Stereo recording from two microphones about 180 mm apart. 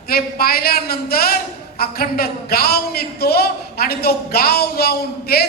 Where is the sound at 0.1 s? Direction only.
55° left (ahead or behind).